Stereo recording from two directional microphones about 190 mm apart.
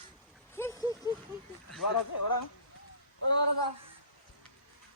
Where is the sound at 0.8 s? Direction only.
20° right (ahead or behind).